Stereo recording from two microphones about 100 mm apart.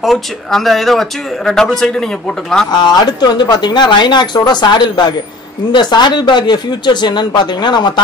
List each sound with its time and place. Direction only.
0.0 s speech: centre (ahead or behind)
2.7 s speech: 45° left (ahead or behind)